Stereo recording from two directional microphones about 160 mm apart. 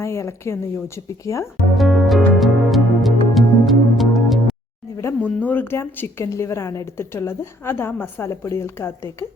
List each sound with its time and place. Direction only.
0.0 s a woman's voice: 15° left (ahead or behind)
1.7 s music: centre (ahead or behind)
4.9 s a woman's voice: 15° left (ahead or behind)